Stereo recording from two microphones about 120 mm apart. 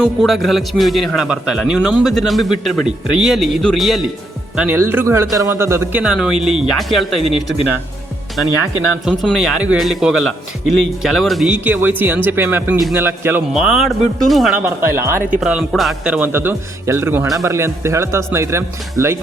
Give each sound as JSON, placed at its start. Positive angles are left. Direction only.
{"t": 0.0, "sound": "a man's voice", "side_deg": 0}
{"t": 4.5, "sound": "a man's voice", "side_deg": -10}
{"t": 6.0, "sound": "a man's voice", "side_deg": -5}
{"t": 9.2, "sound": "a man's voice", "side_deg": 0}
{"t": 13.5, "sound": "a man's voice", "side_deg": -5}
{"t": 14.5, "sound": "a man's voice", "side_deg": -15}
{"t": 15.4, "sound": "a man's voice", "side_deg": -5}